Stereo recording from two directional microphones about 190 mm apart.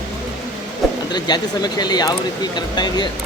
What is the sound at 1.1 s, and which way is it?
Speech, 20° left (ahead or behind).